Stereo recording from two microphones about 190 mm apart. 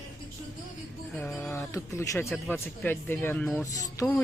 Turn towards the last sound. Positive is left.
turn(degrees=10)  # may be behind; listen again after turning